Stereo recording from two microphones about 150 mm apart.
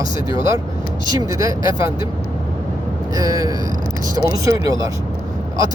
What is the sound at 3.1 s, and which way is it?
Speech, 25° right (ahead or behind).